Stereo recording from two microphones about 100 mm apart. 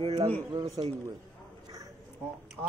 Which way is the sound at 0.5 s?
35° right (ahead or behind).